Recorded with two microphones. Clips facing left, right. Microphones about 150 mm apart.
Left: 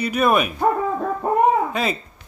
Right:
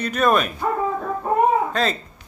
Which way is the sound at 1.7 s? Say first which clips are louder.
Right 1 dB; 10° left (ahead or behind).